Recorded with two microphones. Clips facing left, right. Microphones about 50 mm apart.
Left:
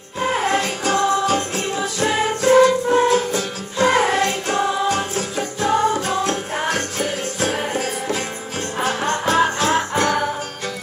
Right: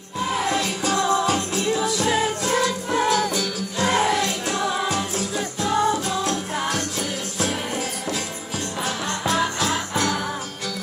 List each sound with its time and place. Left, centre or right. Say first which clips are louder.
0.2 s music: left 4 dB; left